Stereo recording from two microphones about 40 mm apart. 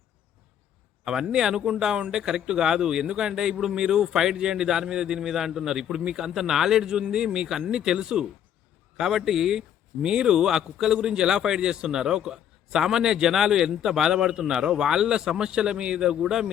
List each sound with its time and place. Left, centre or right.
1.0 s speech: centre
16.2 s speech: centre